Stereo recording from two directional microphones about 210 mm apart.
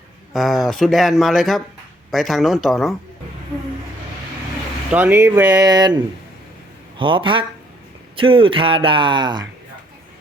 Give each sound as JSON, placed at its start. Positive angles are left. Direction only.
{"t": 0.3, "sound": "speech", "side_deg": 0}
{"t": 4.9, "sound": "speech", "side_deg": -10}
{"t": 7.0, "sound": "a man's voice", "side_deg": -25}